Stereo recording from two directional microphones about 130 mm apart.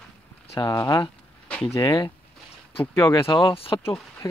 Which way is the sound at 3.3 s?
40° left (ahead or behind).